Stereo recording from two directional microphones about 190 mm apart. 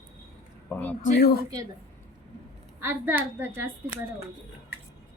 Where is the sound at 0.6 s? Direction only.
10° left (ahead or behind).